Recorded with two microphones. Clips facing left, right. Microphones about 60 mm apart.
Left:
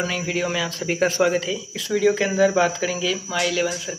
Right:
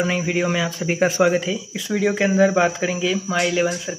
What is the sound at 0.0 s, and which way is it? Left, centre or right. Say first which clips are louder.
Speech: right 3 dB; centre.